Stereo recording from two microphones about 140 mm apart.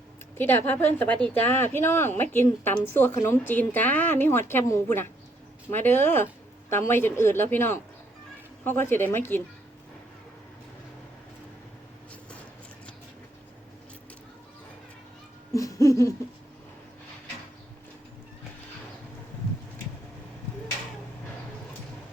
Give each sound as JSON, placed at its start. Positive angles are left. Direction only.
{"t": 0.3, "sound": "a woman's voice", "side_deg": 15}
{"t": 15.5, "sound": "laughter", "side_deg": 25}